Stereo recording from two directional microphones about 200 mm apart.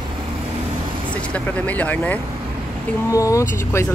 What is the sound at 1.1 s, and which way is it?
Speech, 5° left (ahead or behind).